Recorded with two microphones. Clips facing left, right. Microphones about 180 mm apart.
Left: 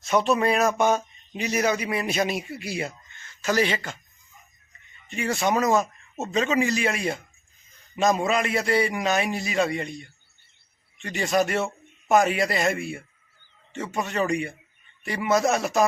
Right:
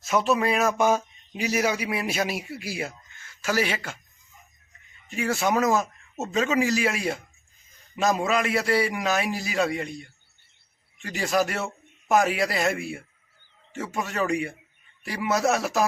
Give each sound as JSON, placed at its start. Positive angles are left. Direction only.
{"t": 0.0, "sound": "speech", "side_deg": -5}
{"t": 5.0, "sound": "speech", "side_deg": -5}